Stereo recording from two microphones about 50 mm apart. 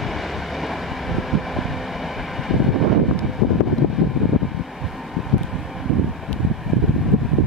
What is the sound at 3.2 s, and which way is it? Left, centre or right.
Vehicle, centre.